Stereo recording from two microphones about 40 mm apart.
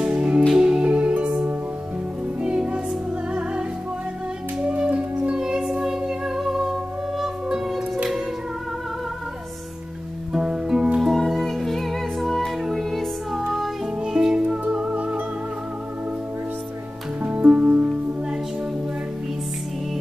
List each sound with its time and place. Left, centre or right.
0.0 s music: right
2.4 s music: right
5.4 s music: centre
10.3 s music: centre
11.0 s music: centre
14.0 s music: right
17.2 s music: right